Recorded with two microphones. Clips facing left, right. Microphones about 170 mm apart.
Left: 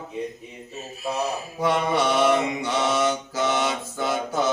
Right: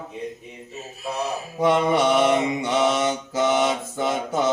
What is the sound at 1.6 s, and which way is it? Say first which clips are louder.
Mantra: right 4 dB; 20° right (ahead or behind).